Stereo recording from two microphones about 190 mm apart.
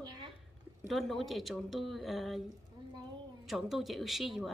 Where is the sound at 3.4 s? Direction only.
Centre (ahead or behind).